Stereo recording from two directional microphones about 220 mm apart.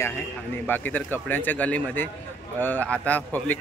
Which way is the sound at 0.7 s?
10° left (ahead or behind).